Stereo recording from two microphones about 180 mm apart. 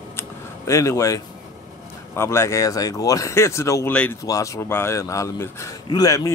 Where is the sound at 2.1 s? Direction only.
15° left (ahead or behind).